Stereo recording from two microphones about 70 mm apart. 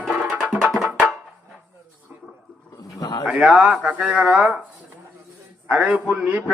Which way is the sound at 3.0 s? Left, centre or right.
Left.